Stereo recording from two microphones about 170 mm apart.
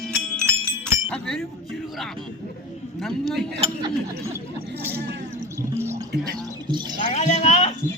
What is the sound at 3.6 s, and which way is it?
Speech, 25° right (ahead or behind).